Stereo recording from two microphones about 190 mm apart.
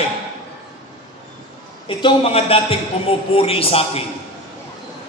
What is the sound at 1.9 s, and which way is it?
Mantra, 25° left (ahead or behind).